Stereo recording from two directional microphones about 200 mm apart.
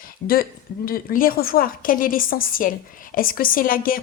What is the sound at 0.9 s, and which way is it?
A woman's voice, 45° left (ahead or behind).